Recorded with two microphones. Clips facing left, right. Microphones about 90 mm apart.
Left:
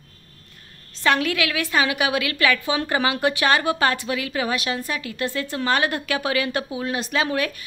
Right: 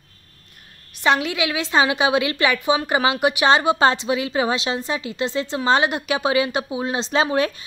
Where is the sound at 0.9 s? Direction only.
20° right (ahead or behind).